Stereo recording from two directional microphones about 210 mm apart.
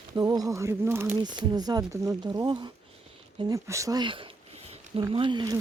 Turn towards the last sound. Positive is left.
turn(degrees=-20)  # may be behind; listen again after turning